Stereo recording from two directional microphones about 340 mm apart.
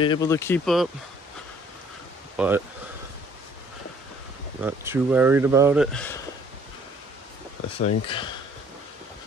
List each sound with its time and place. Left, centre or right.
0.0 s speech: centre
2.3 s speech: centre
4.6 s speech: centre
7.7 s speech: centre